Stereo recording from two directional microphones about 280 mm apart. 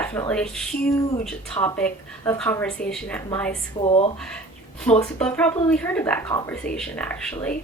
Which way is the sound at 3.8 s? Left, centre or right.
Centre.